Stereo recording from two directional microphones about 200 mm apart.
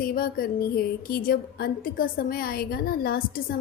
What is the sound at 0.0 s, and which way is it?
A woman's voice, 45° left (ahead or behind).